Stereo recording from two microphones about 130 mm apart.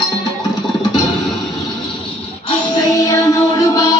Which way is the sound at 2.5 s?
30° left (ahead or behind).